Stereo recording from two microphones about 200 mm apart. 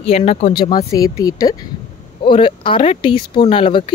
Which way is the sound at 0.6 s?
20° left (ahead or behind).